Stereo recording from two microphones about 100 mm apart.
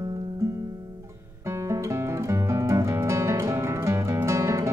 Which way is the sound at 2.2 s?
30° right (ahead or behind).